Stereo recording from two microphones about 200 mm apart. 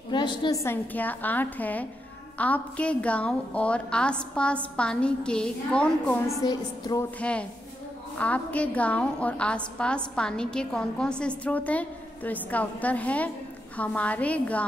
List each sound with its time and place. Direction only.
0.1 s a woman's voice: 20° left (ahead or behind); by 6.3 s 5° left (ahead or behind)
6.4 s a woman's voice: 20° left (ahead or behind)
7.2 s a woman's voice: 5° left (ahead or behind)